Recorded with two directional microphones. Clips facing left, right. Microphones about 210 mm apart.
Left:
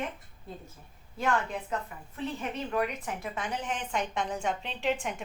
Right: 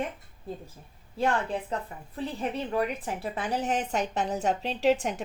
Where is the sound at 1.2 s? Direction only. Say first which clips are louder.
Right 3 dB; 30° right (ahead or behind).